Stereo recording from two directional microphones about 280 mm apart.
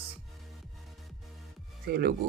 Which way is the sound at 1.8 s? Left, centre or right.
Right.